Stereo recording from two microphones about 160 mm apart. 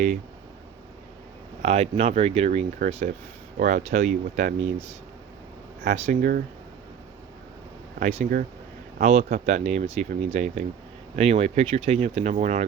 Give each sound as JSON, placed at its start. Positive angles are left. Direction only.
{"t": 1.6, "sound": "speech", "side_deg": -40}
{"t": 5.9, "sound": "speech", "side_deg": -55}
{"t": 7.9, "sound": "speech", "side_deg": -60}
{"t": 9.0, "sound": "a man's voice", "side_deg": -45}